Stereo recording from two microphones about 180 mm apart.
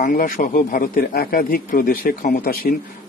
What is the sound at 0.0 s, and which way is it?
Speech, 50° left (ahead or behind).